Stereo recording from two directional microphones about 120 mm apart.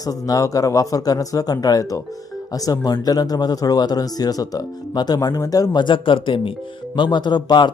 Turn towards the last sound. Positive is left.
turn(degrees=35)  # may be behind; listen again after turning